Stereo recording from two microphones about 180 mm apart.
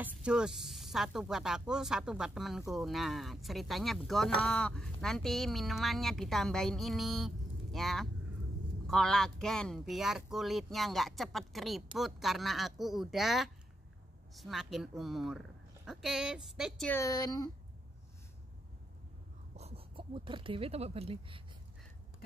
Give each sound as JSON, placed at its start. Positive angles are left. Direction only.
{"t": 0.0, "sound": "speech", "side_deg": -5}
{"t": 16.9, "sound": "speech", "side_deg": 20}
{"t": 19.5, "sound": "speech", "side_deg": -35}